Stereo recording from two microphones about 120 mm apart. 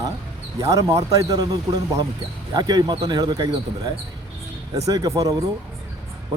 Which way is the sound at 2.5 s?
35° right (ahead or behind).